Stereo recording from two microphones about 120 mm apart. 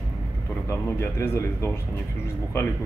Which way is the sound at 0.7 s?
20° left (ahead or behind).